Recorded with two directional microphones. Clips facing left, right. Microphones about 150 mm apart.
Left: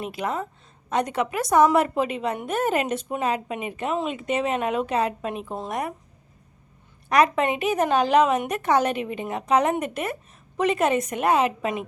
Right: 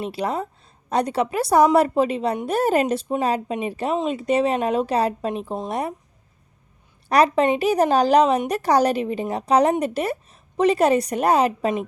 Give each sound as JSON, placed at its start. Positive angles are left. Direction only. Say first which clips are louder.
{"t": 0.0, "sound": "a woman's voice", "louder": "right 3 dB", "side_deg": -30}
{"t": 7.1, "sound": "a woman's voice", "louder": "right 3 dB", "side_deg": -35}